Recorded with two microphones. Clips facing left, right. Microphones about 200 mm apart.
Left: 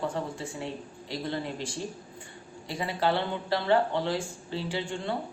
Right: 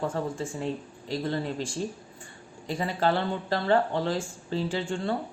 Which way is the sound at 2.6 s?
45° right (ahead or behind).